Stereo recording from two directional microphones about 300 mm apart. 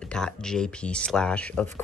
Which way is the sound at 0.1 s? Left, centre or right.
Centre.